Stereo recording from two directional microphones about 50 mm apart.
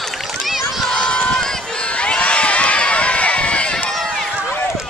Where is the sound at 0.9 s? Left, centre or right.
Centre.